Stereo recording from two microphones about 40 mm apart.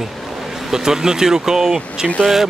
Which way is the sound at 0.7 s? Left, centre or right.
Centre.